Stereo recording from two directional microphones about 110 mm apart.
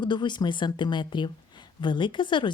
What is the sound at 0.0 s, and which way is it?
Speech, 45° left (ahead or behind).